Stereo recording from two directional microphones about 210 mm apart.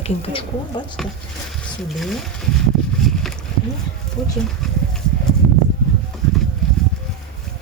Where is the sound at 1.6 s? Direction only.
Centre (ahead or behind).